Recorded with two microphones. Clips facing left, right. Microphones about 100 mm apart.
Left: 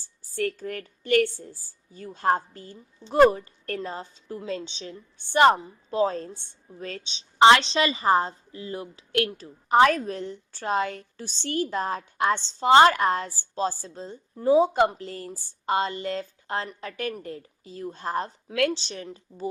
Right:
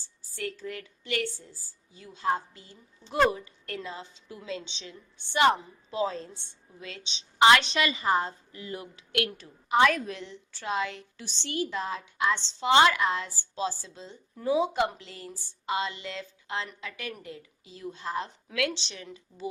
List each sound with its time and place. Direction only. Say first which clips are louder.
0.2 s a woman's voice: left 7 dB; 50° left (ahead or behind)